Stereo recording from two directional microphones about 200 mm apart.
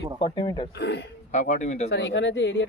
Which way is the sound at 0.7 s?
55° left (ahead or behind).